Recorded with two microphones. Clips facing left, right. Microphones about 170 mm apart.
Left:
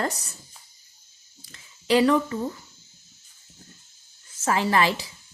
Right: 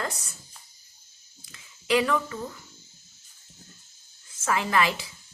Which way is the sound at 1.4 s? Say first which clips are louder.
Left 4 dB; 35° left (ahead or behind).